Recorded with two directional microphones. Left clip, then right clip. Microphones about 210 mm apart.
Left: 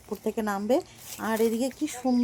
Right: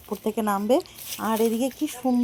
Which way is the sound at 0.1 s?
15° right (ahead or behind).